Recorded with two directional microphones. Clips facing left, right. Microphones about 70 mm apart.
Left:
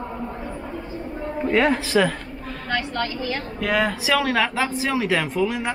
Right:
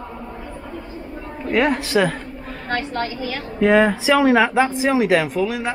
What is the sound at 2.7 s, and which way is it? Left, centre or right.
A woman's voice, right.